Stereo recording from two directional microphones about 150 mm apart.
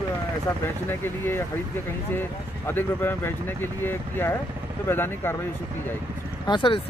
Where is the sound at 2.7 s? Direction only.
15° left (ahead or behind).